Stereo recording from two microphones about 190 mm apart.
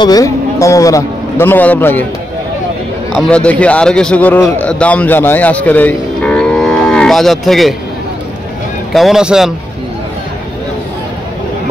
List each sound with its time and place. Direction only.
0.0 s a man's voice: 20° left (ahead or behind)
3.2 s a man's voice: 5° left (ahead or behind)
8.9 s a man's voice: centre (ahead or behind)